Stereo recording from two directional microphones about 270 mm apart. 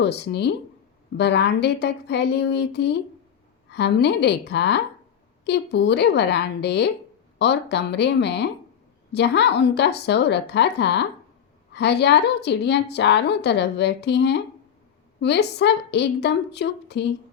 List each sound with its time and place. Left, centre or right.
0.0 s a woman's voice: left